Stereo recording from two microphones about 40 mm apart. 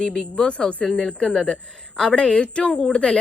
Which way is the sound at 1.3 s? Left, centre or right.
Centre.